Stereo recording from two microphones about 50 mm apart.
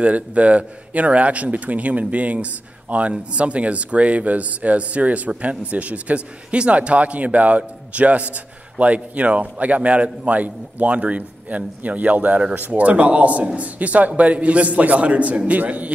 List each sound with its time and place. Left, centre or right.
0.0 s a man's voice: right